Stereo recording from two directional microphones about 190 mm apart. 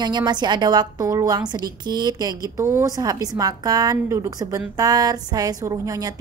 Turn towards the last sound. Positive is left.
turn(degrees=-20)  # may be behind; listen again after turning